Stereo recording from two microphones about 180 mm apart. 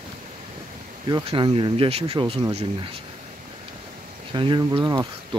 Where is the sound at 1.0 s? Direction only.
25° right (ahead or behind).